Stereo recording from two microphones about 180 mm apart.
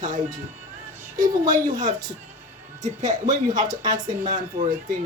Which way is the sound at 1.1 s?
20° right (ahead or behind).